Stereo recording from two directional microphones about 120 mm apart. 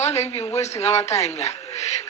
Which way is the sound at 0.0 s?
65° left (ahead or behind).